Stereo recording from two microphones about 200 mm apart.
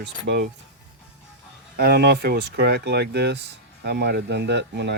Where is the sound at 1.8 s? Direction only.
55° right (ahead or behind).